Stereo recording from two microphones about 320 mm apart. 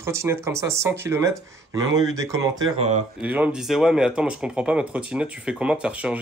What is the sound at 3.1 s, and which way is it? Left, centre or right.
Speech, centre.